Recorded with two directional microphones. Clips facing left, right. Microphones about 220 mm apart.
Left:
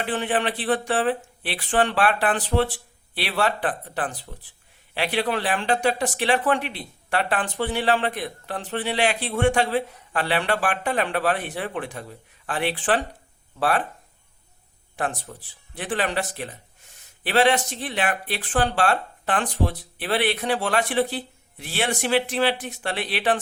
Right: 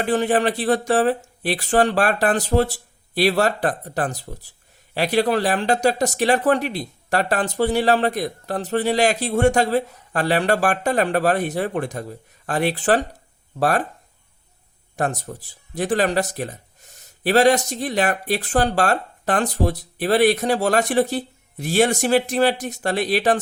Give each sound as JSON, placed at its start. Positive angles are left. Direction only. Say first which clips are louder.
{"t": 0.0, "sound": "speech", "louder": "right 6 dB", "side_deg": -40}
{"t": 14.9, "sound": "speech", "louder": "right 4 dB", "side_deg": -45}